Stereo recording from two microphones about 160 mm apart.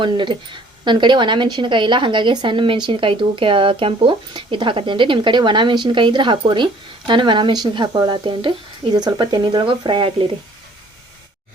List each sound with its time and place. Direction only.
0.0 s a woman's voice: 30° right (ahead or behind)